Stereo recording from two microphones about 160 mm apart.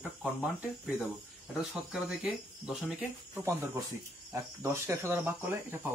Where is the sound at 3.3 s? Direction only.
15° right (ahead or behind).